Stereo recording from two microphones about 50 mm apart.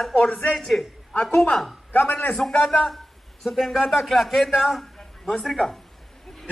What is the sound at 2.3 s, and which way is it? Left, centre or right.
A man's voice, centre.